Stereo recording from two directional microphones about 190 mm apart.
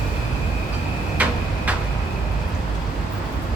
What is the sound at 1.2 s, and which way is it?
Tick-tock, 5° right (ahead or behind).